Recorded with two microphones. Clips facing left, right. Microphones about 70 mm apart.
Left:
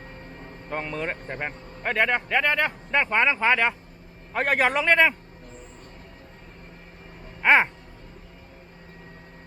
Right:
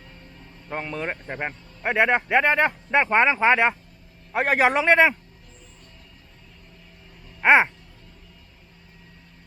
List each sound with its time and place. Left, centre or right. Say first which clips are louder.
0.0 s a sound: left 6 dB; left
0.7 s a man's voice: even; centre
7.4 s a man's voice: right 2 dB; centre